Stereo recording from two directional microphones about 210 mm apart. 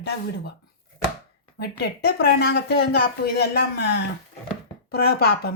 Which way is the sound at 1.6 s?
50° left (ahead or behind).